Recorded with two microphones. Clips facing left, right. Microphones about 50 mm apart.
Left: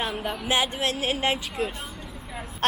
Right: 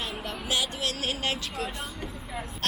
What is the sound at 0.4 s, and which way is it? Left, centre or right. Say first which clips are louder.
A woman's voice: left 5 dB; left.